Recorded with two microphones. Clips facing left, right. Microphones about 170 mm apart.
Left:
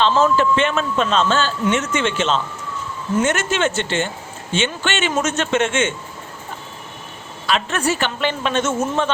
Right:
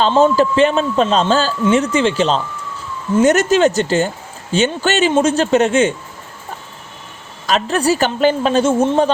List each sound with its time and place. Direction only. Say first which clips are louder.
0.0 s a man's voice: right 4 dB; 30° right (ahead or behind)
7.4 s a man's voice: right 5 dB; 40° right (ahead or behind)